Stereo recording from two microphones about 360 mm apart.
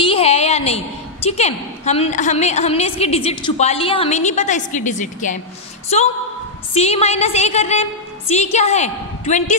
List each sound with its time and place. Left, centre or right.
0.0 s a woman's voice: centre